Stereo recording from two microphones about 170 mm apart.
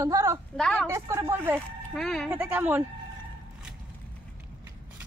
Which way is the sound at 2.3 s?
10° right (ahead or behind).